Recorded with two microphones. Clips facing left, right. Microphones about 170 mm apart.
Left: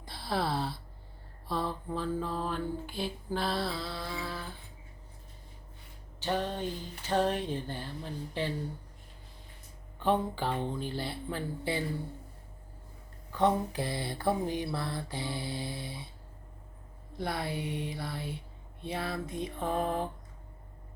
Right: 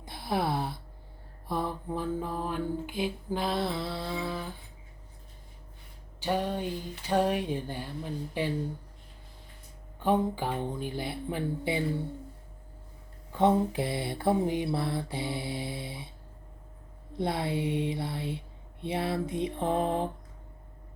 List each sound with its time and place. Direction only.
0.0 s speech: 20° right (ahead or behind)
1.5 s mantra: 15° right (ahead or behind)
6.1 s mantra: 10° right (ahead or behind)
10.0 s mantra: 15° right (ahead or behind)
13.3 s a sound: 25° right (ahead or behind)
17.2 s a sound: 25° right (ahead or behind)